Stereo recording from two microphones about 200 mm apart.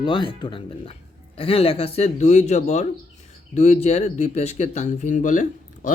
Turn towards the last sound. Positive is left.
turn(degrees=40)  # may be behind; listen again after turning